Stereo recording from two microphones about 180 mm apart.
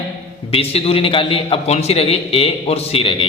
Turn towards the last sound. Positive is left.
turn(degrees=30)  # may be behind; listen again after turning